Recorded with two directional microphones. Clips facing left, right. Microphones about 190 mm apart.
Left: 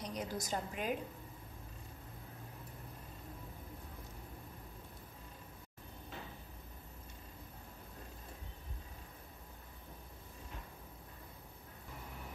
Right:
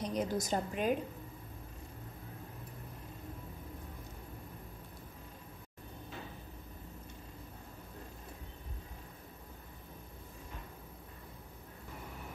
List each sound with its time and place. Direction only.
0.0 s a woman's voice: 25° right (ahead or behind)